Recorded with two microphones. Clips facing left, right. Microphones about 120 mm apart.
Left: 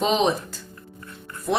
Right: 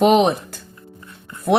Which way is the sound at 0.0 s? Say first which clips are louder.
Right 7 dB; 60° right (ahead or behind).